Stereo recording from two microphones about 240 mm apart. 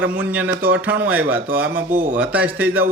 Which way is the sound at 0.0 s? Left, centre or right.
Centre.